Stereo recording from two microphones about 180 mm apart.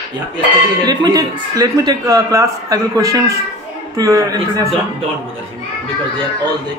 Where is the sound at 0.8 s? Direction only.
20° right (ahead or behind).